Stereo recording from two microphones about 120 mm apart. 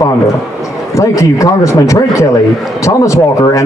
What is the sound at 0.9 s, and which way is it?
Speech, 25° left (ahead or behind).